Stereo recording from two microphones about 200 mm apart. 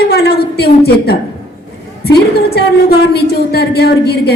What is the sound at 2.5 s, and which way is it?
A woman's voice, 55° left (ahead or behind).